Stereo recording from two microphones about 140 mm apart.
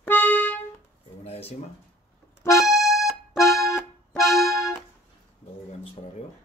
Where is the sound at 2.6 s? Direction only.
Centre (ahead or behind).